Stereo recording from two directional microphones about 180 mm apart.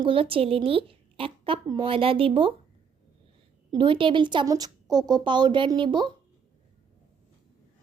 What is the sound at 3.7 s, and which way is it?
A woman's voice, 30° right (ahead or behind).